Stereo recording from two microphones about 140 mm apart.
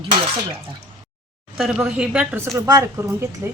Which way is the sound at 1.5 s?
5° right (ahead or behind).